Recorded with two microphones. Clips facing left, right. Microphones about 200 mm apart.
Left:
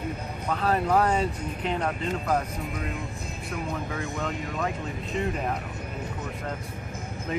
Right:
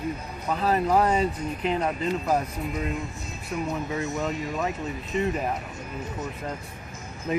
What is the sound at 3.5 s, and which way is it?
Speech, 55° left (ahead or behind).